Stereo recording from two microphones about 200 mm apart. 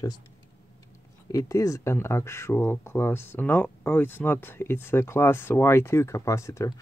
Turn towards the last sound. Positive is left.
turn(degrees=15)  # may be behind; listen again after turning